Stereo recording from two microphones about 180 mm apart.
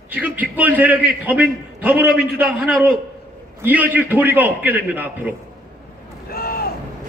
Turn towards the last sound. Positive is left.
turn(degrees=55)  # may be behind; listen again after turning